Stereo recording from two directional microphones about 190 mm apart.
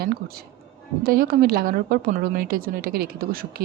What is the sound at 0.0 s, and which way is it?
A woman's voice, 50° right (ahead or behind).